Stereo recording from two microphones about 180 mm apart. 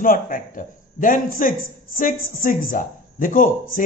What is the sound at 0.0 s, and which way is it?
A man's voice, 50° left (ahead or behind).